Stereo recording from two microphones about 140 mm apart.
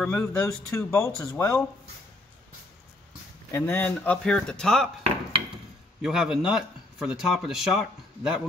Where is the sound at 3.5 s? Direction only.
15° left (ahead or behind).